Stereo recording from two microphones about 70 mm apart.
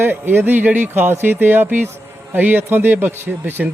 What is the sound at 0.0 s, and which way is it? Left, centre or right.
Speech, right.